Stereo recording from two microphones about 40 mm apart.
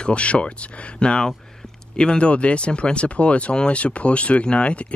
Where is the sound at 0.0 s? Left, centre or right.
Left.